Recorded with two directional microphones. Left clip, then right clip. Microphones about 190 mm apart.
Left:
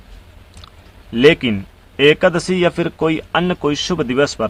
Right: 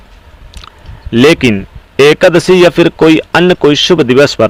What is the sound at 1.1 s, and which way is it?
A man's voice, 40° right (ahead or behind).